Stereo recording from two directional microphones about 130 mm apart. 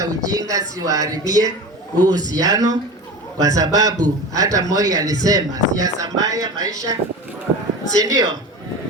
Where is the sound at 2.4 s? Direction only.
30° right (ahead or behind).